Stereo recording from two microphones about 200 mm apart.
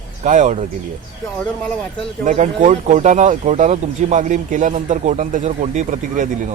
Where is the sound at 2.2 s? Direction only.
35° right (ahead or behind).